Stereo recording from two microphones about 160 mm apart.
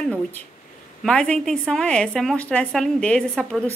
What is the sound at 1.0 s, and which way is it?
A woman's voice, 5° left (ahead or behind).